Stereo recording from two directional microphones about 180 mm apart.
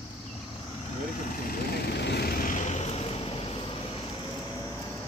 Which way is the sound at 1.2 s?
55° left (ahead or behind).